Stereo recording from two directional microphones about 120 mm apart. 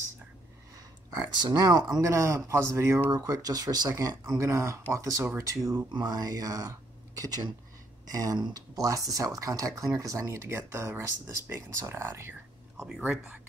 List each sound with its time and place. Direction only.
1.3 s speech: 35° right (ahead or behind)
8.1 s speech: 30° right (ahead or behind)
13.0 s speech: 5° right (ahead or behind)